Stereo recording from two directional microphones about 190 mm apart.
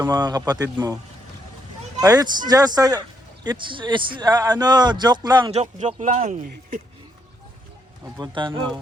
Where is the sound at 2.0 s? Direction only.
20° right (ahead or behind).